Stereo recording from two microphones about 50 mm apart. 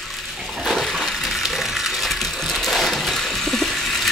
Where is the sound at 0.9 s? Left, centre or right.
Centre.